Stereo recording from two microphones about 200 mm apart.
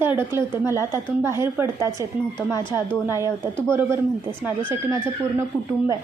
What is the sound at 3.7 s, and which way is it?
Speech, 15° right (ahead or behind).